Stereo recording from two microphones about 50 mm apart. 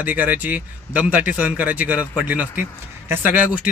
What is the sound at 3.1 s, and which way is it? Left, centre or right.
Speech, right.